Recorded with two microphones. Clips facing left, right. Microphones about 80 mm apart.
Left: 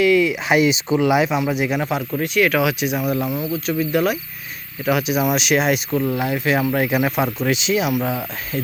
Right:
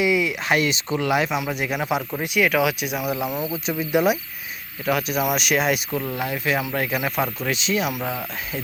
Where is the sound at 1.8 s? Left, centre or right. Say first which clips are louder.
Left 2 dB; centre.